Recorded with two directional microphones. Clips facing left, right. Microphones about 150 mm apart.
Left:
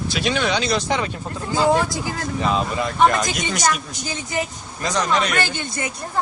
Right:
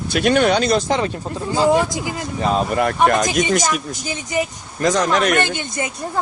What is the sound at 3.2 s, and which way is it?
Speech, 45° right (ahead or behind).